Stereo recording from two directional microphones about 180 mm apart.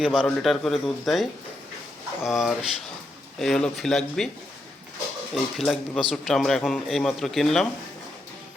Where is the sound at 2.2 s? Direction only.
Centre (ahead or behind).